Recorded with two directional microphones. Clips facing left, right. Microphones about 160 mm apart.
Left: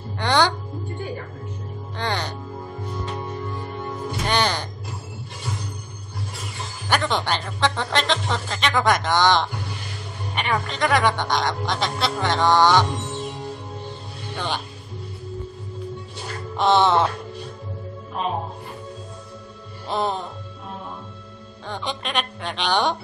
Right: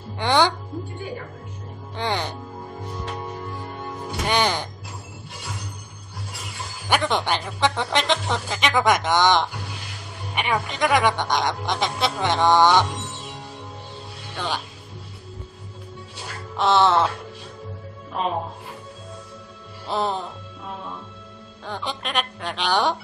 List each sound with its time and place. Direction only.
0.2 s speech: 15° right (ahead or behind)
2.0 s music: 15° right (ahead or behind)
4.3 s music: 15° right (ahead or behind)
6.9 s speech: 15° right (ahead or behind)
16.5 s speech: centre (ahead or behind)
19.9 s speech: centre (ahead or behind)
21.6 s speech: 5° right (ahead or behind)